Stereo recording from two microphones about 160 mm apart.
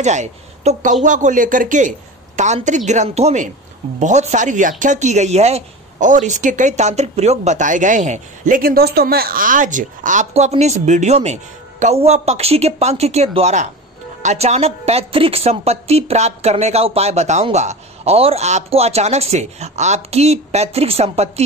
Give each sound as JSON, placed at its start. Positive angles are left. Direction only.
{"t": 0.0, "sound": "a woman's voice", "side_deg": -45}